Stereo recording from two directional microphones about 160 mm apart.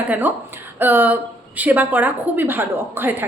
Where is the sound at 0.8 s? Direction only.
10° right (ahead or behind).